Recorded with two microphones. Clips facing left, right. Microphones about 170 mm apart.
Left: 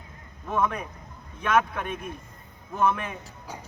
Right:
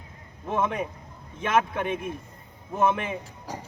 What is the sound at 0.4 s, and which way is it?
Speech, 25° right (ahead or behind).